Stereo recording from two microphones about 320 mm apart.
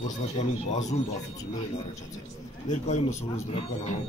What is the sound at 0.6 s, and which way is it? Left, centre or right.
Speech, left.